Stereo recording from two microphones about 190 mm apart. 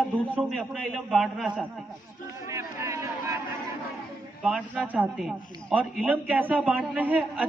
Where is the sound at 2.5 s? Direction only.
15° right (ahead or behind).